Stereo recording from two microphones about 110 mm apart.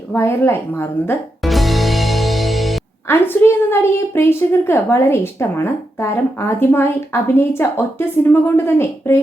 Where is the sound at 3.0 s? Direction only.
20° left (ahead or behind).